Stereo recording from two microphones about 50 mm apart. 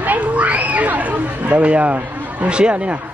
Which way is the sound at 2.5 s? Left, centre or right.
Right.